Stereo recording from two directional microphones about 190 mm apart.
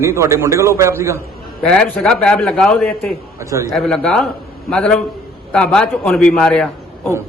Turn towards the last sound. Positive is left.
turn(degrees=5)  # may be behind; listen again after turning